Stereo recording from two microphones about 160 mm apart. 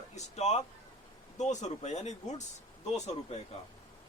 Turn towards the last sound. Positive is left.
turn(degrees=45)  # may be behind; listen again after turning